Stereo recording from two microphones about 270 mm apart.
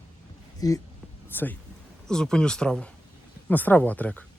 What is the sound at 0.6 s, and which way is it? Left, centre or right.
Speech, centre.